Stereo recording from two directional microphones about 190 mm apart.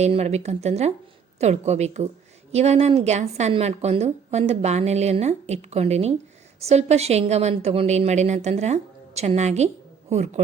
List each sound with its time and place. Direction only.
0.0 s a woman's voice: 35° right (ahead or behind)